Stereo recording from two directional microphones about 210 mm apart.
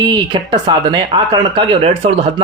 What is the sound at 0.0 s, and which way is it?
Speech, 20° right (ahead or behind).